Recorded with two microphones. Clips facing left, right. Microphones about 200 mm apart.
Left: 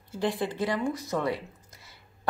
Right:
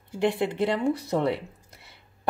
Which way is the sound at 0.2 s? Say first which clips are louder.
Right 4 dB; 25° right (ahead or behind).